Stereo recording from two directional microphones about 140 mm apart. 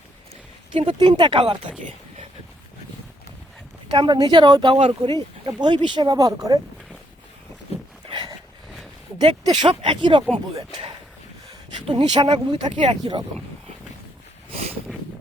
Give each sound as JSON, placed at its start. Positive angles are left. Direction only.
{"t": 0.7, "sound": "speech", "side_deg": -40}
{"t": 3.8, "sound": "speech", "side_deg": -35}
{"t": 8.0, "sound": "a sound", "side_deg": -35}
{"t": 9.4, "sound": "speech", "side_deg": -35}